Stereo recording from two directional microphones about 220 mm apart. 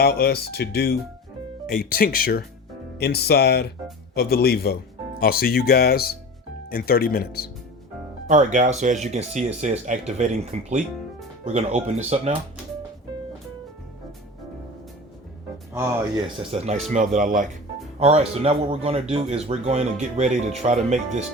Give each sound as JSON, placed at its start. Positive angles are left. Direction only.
{"t": 0.0, "sound": "speech", "side_deg": 45}
{"t": 8.3, "sound": "speech", "side_deg": -35}
{"t": 15.7, "sound": "speech", "side_deg": -10}
{"t": 16.5, "sound": "speech", "side_deg": -30}